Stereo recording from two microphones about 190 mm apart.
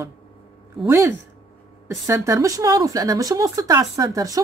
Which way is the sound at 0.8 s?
15° right (ahead or behind).